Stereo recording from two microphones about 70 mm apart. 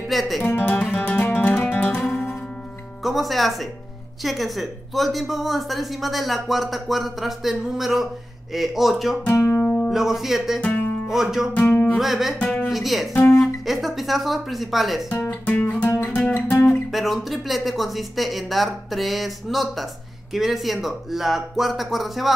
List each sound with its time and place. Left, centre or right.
0.1 s speech: centre
0.4 s speech: left
0.9 s music: left
3.0 s speech: centre
9.3 s music: left
9.8 s speech: centre
10.6 s music: left
11.1 s speech: centre
13.1 s speech: left
13.7 s speech: centre
15.0 s speech: left
15.4 s music: left
16.9 s speech: centre